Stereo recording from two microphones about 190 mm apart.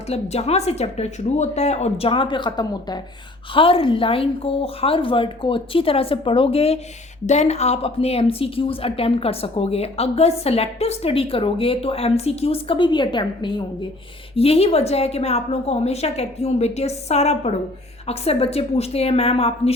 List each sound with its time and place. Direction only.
0.1 s a woman's voice: 35° left (ahead or behind)